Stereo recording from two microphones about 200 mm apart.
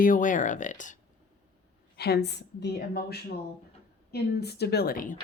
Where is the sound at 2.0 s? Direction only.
55° left (ahead or behind).